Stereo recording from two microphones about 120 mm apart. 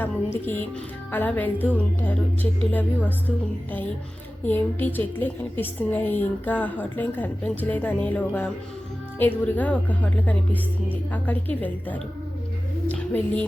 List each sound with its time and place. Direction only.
0.0 s a woman's voice: 15° left (ahead or behind)